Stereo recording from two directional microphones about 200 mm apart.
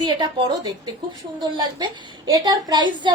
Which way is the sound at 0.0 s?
25° right (ahead or behind).